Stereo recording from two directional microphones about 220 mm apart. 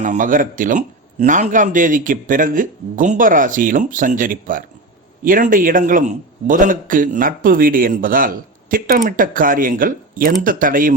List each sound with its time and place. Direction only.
0.0 s a man's voice: 35° right (ahead or behind)